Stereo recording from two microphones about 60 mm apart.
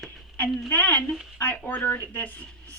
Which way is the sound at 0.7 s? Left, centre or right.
Left.